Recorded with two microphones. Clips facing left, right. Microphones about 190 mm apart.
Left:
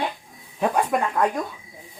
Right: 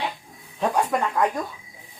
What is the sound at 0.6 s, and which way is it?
Speech, 5° left (ahead or behind).